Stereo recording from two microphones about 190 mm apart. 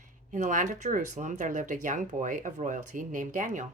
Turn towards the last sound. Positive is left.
turn(degrees=-40)  # may be behind; listen again after turning